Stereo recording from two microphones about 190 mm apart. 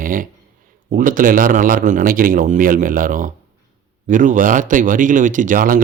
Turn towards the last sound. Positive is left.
turn(degrees=-45)  # may be behind; listen again after turning